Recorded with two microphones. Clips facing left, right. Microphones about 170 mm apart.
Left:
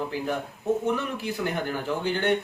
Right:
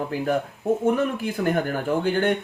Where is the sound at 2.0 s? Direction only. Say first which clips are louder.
Right 2 dB; 50° right (ahead or behind).